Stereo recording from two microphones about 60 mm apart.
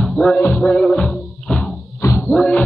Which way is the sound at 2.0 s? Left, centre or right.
Left.